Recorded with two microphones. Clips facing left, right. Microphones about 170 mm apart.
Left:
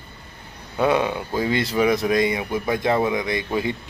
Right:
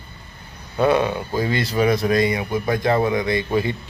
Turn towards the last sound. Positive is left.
turn(degrees=15)  # may be behind; listen again after turning